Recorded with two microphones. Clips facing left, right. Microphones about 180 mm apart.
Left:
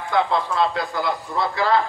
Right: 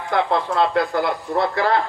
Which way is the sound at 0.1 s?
55° right (ahead or behind).